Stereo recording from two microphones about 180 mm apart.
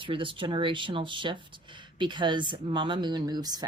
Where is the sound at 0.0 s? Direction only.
30° right (ahead or behind).